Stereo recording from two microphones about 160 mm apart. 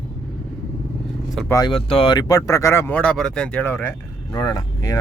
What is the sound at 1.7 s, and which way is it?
Speech, 35° left (ahead or behind).